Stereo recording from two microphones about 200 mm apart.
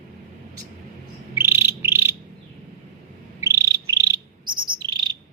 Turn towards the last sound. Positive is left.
turn(degrees=-20)  # may be behind; listen again after turning